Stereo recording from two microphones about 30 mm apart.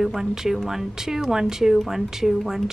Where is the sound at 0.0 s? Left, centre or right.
Centre.